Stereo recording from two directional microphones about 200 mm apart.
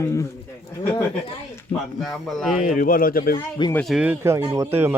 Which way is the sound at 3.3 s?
20° left (ahead or behind).